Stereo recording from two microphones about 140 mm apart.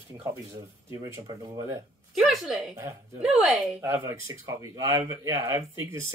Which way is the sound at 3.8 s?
15° right (ahead or behind).